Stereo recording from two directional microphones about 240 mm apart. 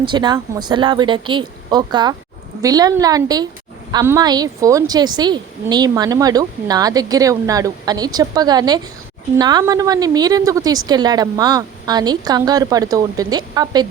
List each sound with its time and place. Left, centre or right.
0.0 s a woman's voice: centre